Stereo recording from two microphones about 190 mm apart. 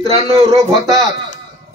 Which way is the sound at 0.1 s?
30° right (ahead or behind).